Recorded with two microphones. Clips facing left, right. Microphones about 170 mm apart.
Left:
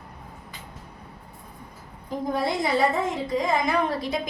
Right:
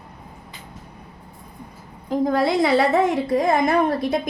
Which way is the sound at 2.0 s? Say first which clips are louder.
Right 7 dB; 90° right.